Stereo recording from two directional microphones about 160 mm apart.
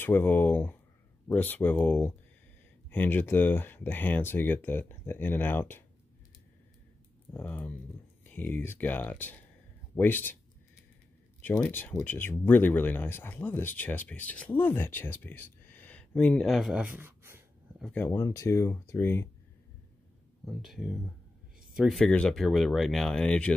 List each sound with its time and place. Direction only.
0.0 s speech: 10° left (ahead or behind)
7.3 s speech: 10° left (ahead or behind)
11.6 s speech: 10° left (ahead or behind); by 17.4 s 15° right (ahead or behind)
17.9 s speech: 15° left (ahead or behind)
20.4 s speech: centre (ahead or behind)